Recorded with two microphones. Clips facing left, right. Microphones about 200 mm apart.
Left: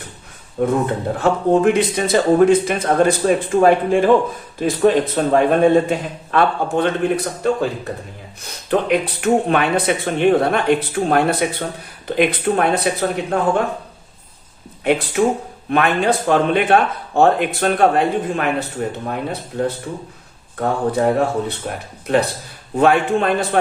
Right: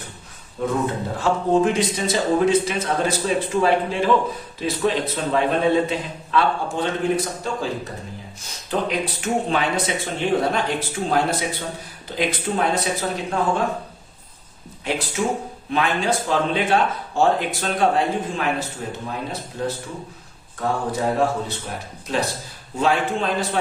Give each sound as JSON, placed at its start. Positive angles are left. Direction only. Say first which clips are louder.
{"t": 0.6, "sound": "a man's voice", "louder": "left 5 dB", "side_deg": 60}
{"t": 8.4, "sound": "speech", "louder": "left 6 dB", "side_deg": 60}
{"t": 14.8, "sound": "speech", "louder": "left 7 dB", "side_deg": 60}